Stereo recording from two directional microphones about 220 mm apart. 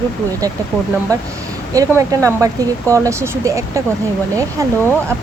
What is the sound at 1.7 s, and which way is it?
Speech, 15° right (ahead or behind).